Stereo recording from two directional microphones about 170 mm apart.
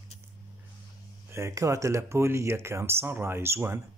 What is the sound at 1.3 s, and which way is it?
Speech, 15° right (ahead or behind).